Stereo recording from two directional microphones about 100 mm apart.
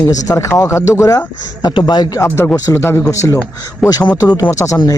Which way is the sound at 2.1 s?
25° left (ahead or behind).